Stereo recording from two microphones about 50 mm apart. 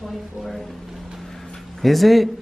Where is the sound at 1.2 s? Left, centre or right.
Centre.